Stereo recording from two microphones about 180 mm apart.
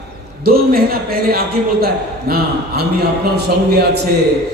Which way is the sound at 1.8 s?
60° right (ahead or behind).